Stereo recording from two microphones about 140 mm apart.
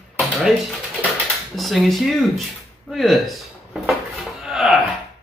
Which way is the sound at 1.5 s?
Centre (ahead or behind).